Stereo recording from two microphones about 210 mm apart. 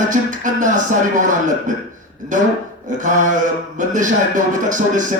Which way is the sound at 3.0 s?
35° right (ahead or behind).